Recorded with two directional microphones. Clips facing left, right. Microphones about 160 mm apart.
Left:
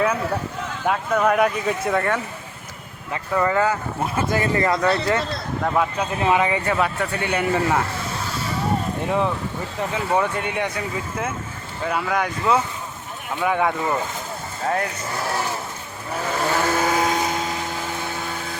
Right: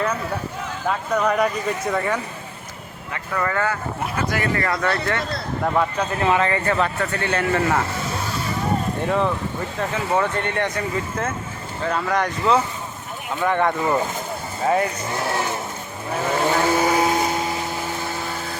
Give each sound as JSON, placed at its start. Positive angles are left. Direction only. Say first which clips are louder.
{"t": 0.9, "sound": "speech", "louder": "left 2 dB", "side_deg": 5}
{"t": 3.1, "sound": "speech", "louder": "left 4 dB", "side_deg": 15}
{"t": 5.6, "sound": "speech", "louder": "right 1 dB", "side_deg": 5}
{"t": 9.0, "sound": "speech", "louder": "right 1 dB", "side_deg": 15}
{"t": 16.4, "sound": "vehicle", "louder": "right 2 dB", "side_deg": -15}